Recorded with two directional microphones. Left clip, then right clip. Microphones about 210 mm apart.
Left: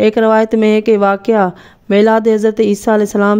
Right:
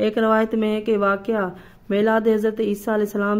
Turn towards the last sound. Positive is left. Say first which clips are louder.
# left 10 dB
turn(degrees=40)  # may be behind; listen again after turning